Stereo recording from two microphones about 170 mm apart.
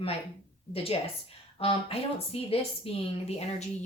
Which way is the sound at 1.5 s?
30° left (ahead or behind).